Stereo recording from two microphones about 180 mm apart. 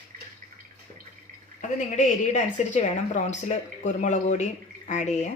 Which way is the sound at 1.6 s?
40° left (ahead or behind).